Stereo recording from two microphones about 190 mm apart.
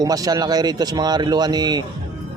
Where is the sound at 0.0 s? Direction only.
20° right (ahead or behind).